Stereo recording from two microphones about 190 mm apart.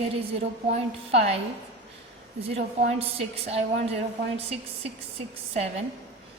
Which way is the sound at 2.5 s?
30° right (ahead or behind).